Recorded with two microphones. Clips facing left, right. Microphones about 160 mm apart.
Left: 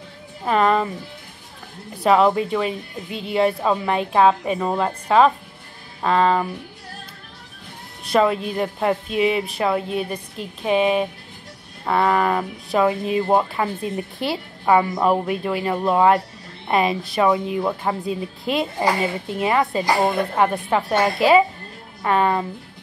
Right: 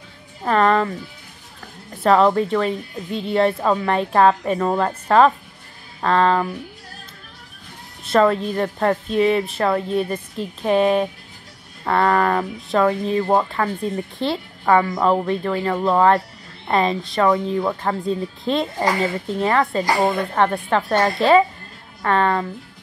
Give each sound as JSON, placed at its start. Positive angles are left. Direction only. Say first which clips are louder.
{"t": 0.5, "sound": "speech", "louder": "right 1 dB", "side_deg": 5}
{"t": 2.0, "sound": "speech", "louder": "right 1 dB", "side_deg": 5}
{"t": 8.1, "sound": "a woman's voice", "louder": "right 2 dB", "side_deg": 10}